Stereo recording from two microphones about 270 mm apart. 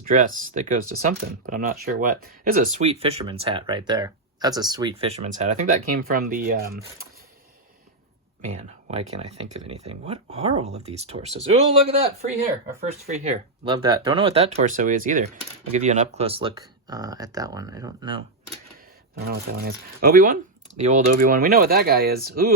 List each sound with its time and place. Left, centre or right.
0.0 s speech: right
8.9 s speech: right
19.3 s speech: right